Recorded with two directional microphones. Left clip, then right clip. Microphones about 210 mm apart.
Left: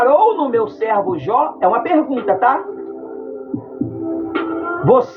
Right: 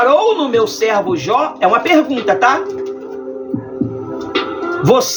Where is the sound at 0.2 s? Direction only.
20° right (ahead or behind).